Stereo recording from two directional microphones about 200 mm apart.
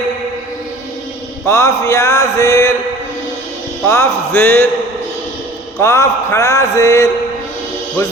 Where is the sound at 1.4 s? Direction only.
15° left (ahead or behind).